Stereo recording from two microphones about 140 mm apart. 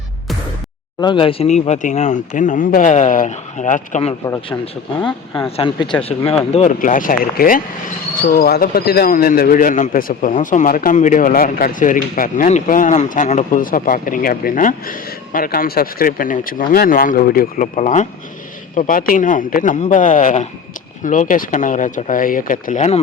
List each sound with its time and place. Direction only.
1.0 s speech: 40° left (ahead or behind)
1.5 s speech: 55° left (ahead or behind)
5.5 s speech: 35° left (ahead or behind)
6.7 s speech: 75° left (ahead or behind)
12.5 s speech: 60° left (ahead or behind); by 22.8 s 80° left